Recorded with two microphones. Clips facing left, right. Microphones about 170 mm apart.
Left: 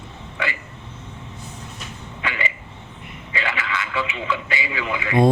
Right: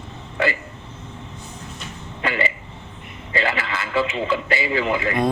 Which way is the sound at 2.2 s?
40° right (ahead or behind).